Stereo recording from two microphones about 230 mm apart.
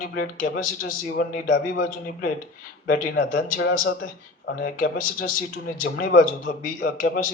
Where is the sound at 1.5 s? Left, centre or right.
Left.